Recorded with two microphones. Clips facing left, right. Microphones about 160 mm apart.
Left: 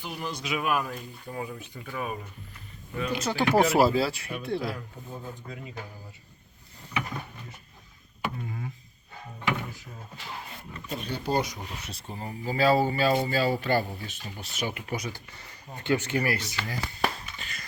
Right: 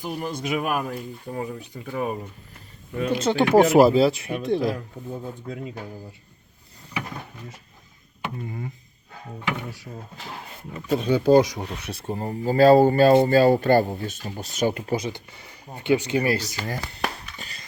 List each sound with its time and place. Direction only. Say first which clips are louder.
0.0 s speech: right 6 dB; 45° right (ahead or behind); by 3.4 s 25° right (ahead or behind)
3.5 s speech: right 6 dB; 50° right (ahead or behind)
3.8 s speech: right 7 dB; 20° right (ahead or behind)
10.8 s speech: right 13 dB; 90° right; by 14.9 s 40° right (ahead or behind)
14.9 s speech: right 7 dB; 20° right (ahead or behind)
16.3 s speech: right 6 dB; 40° right (ahead or behind)
17.3 s a sound: right 1 dB; 40° right (ahead or behind)